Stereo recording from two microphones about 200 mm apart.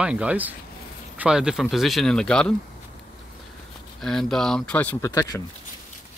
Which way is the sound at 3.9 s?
Centre (ahead or behind).